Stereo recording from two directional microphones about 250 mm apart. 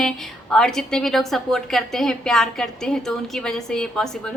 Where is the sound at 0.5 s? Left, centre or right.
Centre.